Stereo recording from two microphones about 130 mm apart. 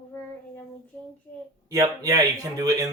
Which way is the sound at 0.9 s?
15° left (ahead or behind).